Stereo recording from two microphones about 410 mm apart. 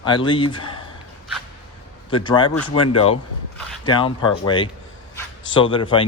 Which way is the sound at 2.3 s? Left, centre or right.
Centre.